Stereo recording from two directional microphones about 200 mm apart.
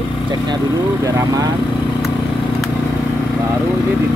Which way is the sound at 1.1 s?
15° right (ahead or behind).